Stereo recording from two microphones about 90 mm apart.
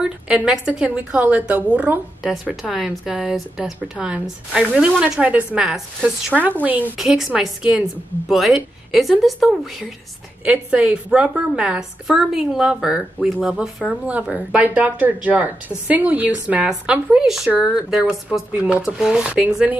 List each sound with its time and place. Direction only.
0.0 s a woman's voice: 10° right (ahead or behind)
2.7 s a woman's voice: 5° right (ahead or behind); by 6.9 s 20° right (ahead or behind)
7.0 s a woman's voice: 5° right (ahead or behind)
10.4 s a woman's voice: 15° right (ahead or behind)